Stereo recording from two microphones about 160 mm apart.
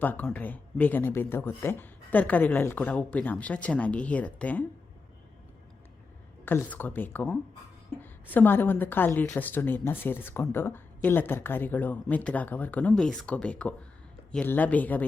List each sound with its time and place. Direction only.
0.0 s a woman's voice: 10° left (ahead or behind)
6.4 s a woman's voice: 10° left (ahead or behind)